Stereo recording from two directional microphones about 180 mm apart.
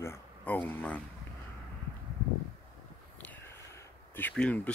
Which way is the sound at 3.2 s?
10° left (ahead or behind).